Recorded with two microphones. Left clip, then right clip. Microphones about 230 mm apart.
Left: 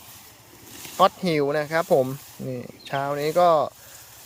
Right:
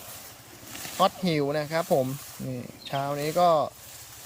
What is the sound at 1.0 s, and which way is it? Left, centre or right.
Speech, centre.